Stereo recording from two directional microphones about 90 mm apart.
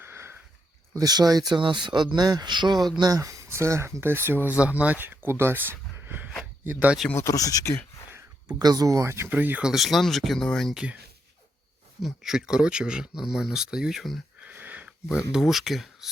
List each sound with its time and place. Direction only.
0.0 s sniff: 25° right (ahead or behind)
0.9 s speech: 45° right (ahead or behind)
3.0 s speech: 40° right (ahead or behind); by 6.9 s 15° right (ahead or behind)
7.2 s speech: 40° left (ahead or behind)
8.4 s speech: 50° right (ahead or behind); by 9.3 s 30° right (ahead or behind)
9.3 s speech: 15° right (ahead or behind)
9.6 s speech: centre (ahead or behind)
12.0 s speech: 5° right (ahead or behind)
14.4 s a sound: 20° right (ahead or behind)
15.3 s speech: 5° right (ahead or behind)